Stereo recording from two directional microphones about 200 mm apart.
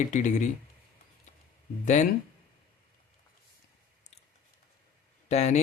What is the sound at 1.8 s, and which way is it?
Speech, 35° left (ahead or behind).